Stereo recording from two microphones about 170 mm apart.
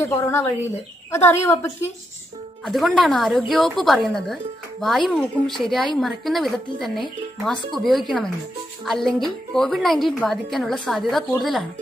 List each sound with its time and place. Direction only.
0.0 s a woman's voice: 15° left (ahead or behind)
2.6 s a woman's voice: centre (ahead or behind)